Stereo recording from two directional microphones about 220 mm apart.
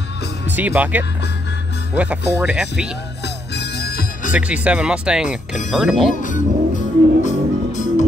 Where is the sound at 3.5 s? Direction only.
45° left (ahead or behind).